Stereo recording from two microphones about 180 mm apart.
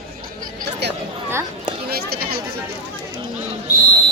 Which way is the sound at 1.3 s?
15° right (ahead or behind).